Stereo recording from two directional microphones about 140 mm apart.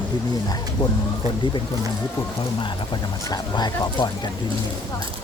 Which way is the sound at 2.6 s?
35° left (ahead or behind).